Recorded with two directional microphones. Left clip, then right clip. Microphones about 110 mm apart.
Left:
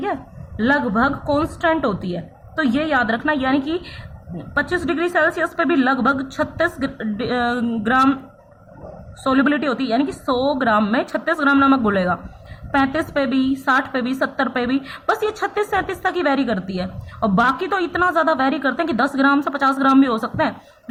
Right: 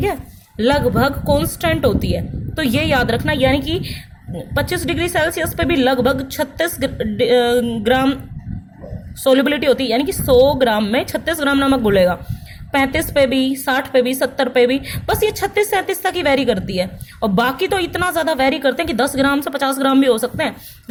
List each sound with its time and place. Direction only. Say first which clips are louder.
0.0 s a woman's voice: right 3 dB; 40° right (ahead or behind)
9.2 s a woman's voice: right 5 dB; 30° right (ahead or behind)